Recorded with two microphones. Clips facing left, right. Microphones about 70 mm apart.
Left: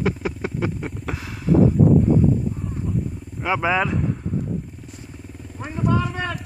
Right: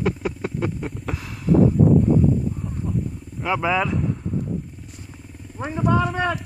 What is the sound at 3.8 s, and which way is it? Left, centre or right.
Speech, centre.